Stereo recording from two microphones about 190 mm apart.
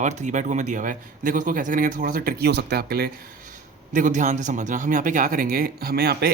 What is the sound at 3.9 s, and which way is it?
Speech, 45° right (ahead or behind).